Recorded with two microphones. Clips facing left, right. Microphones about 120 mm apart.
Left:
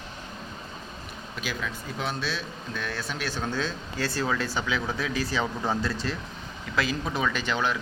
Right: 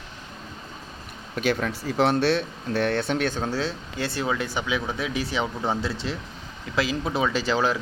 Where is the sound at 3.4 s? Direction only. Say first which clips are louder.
Right 3 dB; 35° right (ahead or behind).